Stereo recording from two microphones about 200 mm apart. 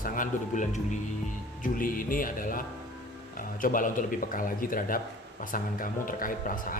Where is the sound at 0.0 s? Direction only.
40° left (ahead or behind).